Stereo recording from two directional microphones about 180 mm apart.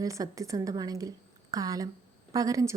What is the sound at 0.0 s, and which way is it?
A woman's voice, 20° right (ahead or behind).